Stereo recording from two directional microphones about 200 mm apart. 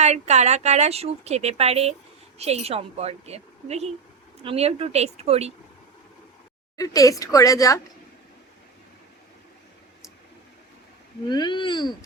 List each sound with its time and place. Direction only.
0.0 s speech: 35° right (ahead or behind)
6.7 s a woman's voice: 15° left (ahead or behind)
11.3 s speech: 20° left (ahead or behind)